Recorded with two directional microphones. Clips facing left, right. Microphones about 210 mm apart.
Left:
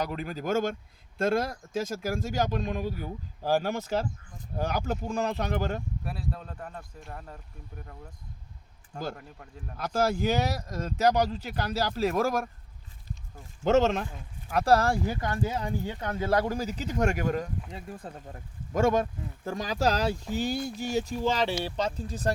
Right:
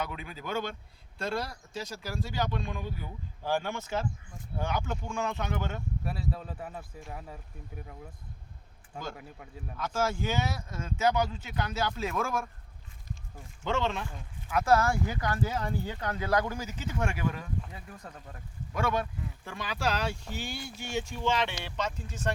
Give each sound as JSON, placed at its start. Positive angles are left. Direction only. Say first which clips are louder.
{"t": 0.0, "sound": "speech", "louder": "left 6 dB", "side_deg": 40}
{"t": 6.0, "sound": "speech", "louder": "right 1 dB", "side_deg": 0}
{"t": 9.1, "sound": "speech", "louder": "right 1 dB", "side_deg": -5}
{"t": 9.8, "sound": "speech", "louder": "left 4 dB", "side_deg": 35}
{"t": 13.7, "sound": "speech", "louder": "left 8 dB", "side_deg": 40}
{"t": 17.7, "sound": "speech", "louder": "left 6 dB", "side_deg": 30}
{"t": 18.7, "sound": "speech", "louder": "left 6 dB", "side_deg": 40}